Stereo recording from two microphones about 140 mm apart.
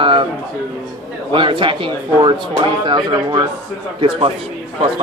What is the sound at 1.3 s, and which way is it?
Speech, 35° right (ahead or behind).